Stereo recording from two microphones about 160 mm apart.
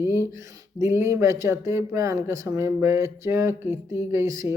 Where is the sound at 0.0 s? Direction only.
15° right (ahead or behind).